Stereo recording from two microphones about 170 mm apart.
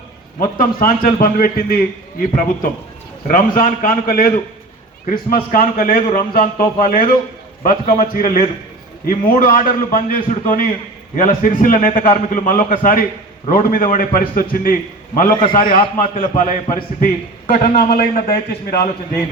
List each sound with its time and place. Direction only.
0.3 s a man's voice: 55° left (ahead or behind)
15.4 s a man's voice: 30° left (ahead or behind)
15.7 s a man's voice: 55° left (ahead or behind)
17.5 s a man's voice: 65° left (ahead or behind)